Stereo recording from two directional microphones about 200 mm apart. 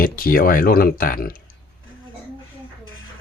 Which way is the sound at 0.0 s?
45° left (ahead or behind).